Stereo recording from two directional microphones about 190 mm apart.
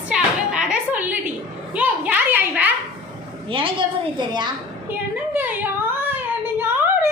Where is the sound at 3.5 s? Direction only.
25° right (ahead or behind).